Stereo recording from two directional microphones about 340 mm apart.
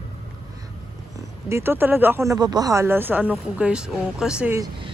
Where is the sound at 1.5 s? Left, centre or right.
Centre.